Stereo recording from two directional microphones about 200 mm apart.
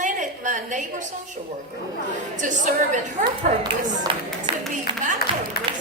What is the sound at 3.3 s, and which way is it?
Speech, 20° right (ahead or behind).